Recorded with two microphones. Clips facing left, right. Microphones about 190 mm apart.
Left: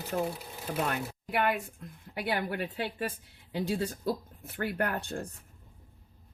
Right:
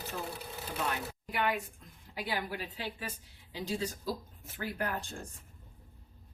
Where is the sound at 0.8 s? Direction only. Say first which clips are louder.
Left 3 dB; 60° left (ahead or behind).